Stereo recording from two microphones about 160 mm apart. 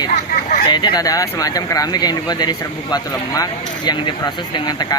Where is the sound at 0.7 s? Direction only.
25° left (ahead or behind).